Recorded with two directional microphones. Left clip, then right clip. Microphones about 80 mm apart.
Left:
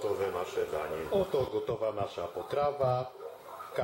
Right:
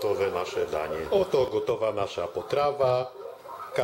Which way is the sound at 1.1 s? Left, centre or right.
Right.